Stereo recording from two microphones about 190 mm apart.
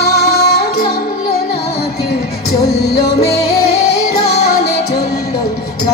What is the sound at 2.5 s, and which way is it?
Music, 55° left (ahead or behind).